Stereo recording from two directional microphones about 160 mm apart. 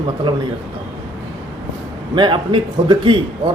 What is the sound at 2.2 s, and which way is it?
A man's voice, 30° right (ahead or behind).